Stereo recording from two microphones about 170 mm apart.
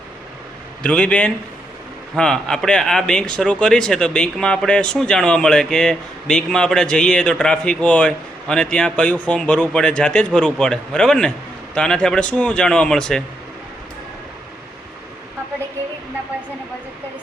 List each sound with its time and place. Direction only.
0.8 s a man's voice: 5° left (ahead or behind)